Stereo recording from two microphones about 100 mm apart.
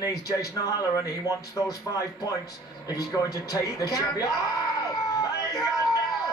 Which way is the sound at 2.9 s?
40° left (ahead or behind).